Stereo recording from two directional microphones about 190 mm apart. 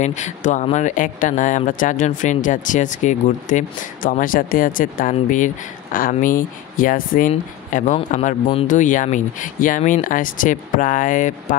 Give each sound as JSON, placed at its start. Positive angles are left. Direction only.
{"t": 0.0, "sound": "speech", "side_deg": 40}